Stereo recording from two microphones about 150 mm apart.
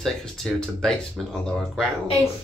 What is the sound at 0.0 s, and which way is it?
Speech, 5° left (ahead or behind).